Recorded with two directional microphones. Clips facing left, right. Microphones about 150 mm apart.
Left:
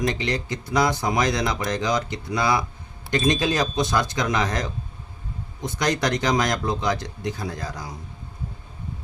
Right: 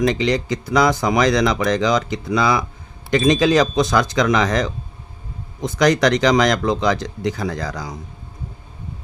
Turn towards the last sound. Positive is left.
turn(degrees=-90)